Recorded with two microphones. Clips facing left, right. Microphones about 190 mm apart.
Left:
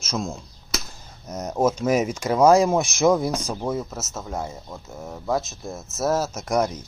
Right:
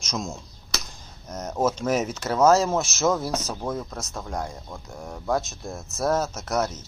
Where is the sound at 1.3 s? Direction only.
10° left (ahead or behind).